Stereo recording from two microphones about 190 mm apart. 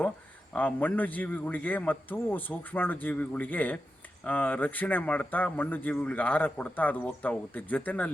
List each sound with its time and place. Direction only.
0.5 s speech: 10° left (ahead or behind)